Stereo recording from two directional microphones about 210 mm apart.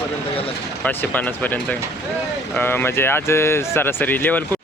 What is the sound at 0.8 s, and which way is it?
Speech, 10° left (ahead or behind).